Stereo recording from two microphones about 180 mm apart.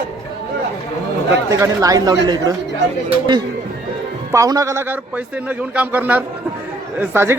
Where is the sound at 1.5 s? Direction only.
15° right (ahead or behind).